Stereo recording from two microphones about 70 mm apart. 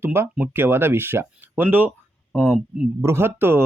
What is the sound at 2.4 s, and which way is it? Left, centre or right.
Speech, centre.